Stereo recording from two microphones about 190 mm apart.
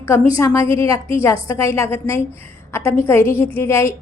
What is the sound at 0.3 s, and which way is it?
A woman's voice, 15° left (ahead or behind).